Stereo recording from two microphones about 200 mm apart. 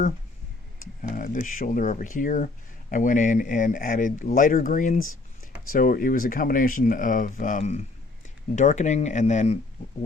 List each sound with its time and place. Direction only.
1.1 s speech: 40° left (ahead or behind)